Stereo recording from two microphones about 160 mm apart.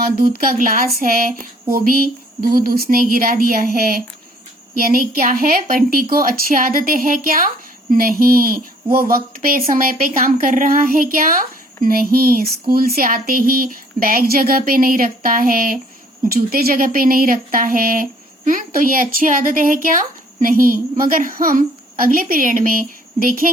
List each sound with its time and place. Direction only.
0.2 s speech: 65° right (ahead or behind)